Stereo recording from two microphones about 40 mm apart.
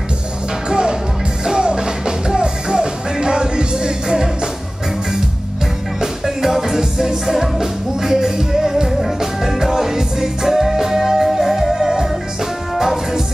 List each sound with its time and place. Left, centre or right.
0.7 s music: centre
5.9 s music: centre